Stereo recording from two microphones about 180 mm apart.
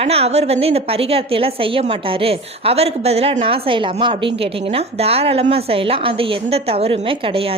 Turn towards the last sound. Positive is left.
turn(degrees=-30)  # may be behind; listen again after turning